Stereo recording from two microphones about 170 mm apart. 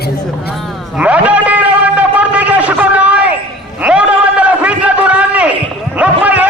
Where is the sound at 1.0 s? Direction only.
10° right (ahead or behind).